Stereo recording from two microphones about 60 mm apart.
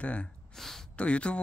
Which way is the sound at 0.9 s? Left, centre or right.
Centre.